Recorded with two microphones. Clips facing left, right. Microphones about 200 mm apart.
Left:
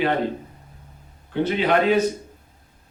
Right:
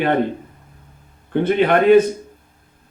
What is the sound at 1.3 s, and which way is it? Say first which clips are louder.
Speech: right 4 dB; 55° right (ahead or behind).